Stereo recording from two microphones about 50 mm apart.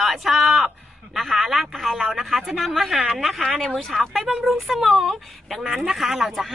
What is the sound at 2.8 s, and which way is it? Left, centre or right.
A woman's voice, centre.